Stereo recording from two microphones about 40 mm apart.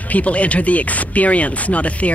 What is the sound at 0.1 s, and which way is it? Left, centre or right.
Speech, left.